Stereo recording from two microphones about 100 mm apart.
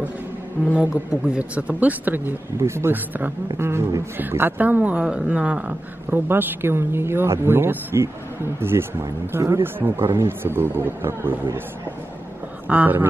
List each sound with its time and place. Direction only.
0.7 s speech: 10° right (ahead or behind)
12.6 s speech: 15° right (ahead or behind)